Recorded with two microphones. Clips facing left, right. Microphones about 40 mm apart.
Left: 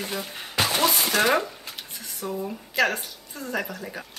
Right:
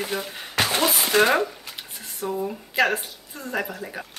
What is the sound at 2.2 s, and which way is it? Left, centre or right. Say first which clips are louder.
A woman's voice: right 3 dB; centre.